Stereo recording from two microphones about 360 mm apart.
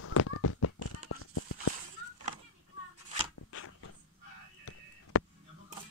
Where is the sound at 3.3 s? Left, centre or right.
Left.